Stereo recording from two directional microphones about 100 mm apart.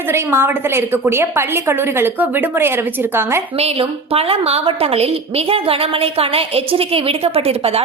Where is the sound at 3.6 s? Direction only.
80° right.